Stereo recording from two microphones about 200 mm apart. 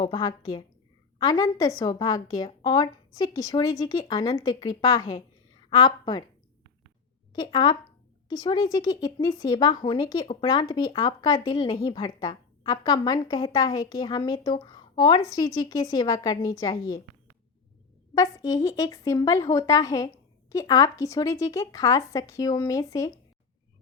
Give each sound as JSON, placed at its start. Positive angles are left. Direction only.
{"t": 0.0, "sound": "speech", "side_deg": 20}
{"t": 7.3, "sound": "speech", "side_deg": 20}
{"t": 18.1, "sound": "speech", "side_deg": 15}